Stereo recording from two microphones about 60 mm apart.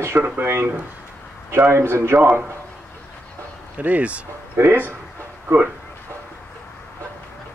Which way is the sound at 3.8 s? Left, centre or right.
Right.